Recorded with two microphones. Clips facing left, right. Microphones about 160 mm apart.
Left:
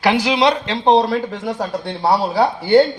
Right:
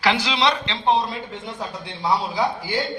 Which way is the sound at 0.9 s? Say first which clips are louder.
Left 8 dB; 85° left.